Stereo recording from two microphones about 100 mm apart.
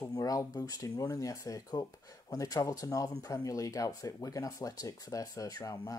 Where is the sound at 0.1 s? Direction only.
35° left (ahead or behind).